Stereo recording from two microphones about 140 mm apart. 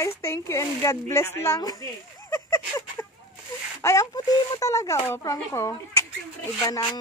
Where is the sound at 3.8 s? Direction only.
20° left (ahead or behind).